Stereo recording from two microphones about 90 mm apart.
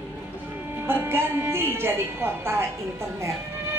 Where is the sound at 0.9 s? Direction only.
25° right (ahead or behind).